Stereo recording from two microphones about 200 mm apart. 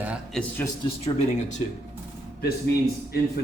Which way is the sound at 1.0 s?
35° left (ahead or behind).